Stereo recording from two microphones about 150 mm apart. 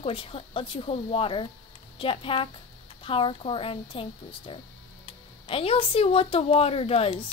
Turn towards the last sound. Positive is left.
turn(degrees=40)  # may be behind; listen again after turning